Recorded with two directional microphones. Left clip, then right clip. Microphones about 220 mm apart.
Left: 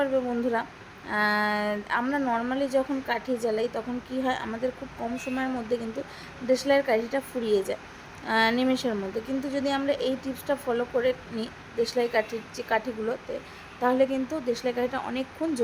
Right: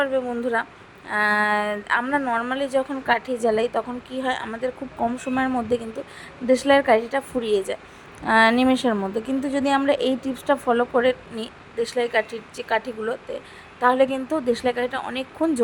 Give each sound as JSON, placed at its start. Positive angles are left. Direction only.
{"t": 0.0, "sound": "speech", "side_deg": -15}